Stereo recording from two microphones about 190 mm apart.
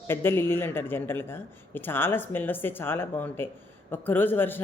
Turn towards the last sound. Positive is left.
turn(degrees=10)  # may be behind; listen again after turning